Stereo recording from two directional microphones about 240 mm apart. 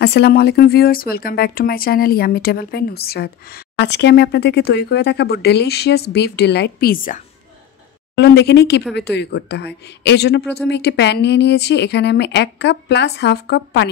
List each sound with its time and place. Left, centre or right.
0.0 s speech: left
8.2 s speech: left